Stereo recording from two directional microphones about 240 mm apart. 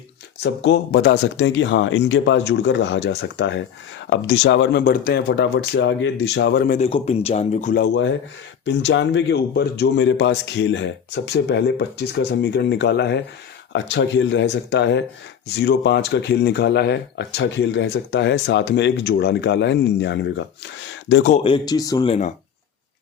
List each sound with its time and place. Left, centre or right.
0.4 s speech: left
6.7 s speech: left
7.8 s speech: left
21.3 s speech: left